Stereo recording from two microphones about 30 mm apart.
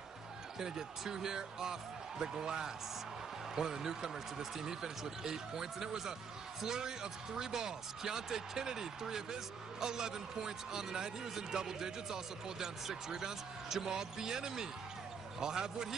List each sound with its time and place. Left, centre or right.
0.6 s speech: centre